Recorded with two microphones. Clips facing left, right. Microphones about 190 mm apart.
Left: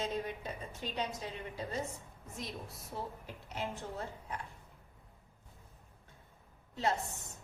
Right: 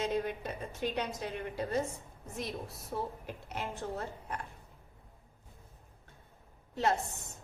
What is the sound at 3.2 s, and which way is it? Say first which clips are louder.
A woman's voice: right 1 dB; 55° right (ahead or behind).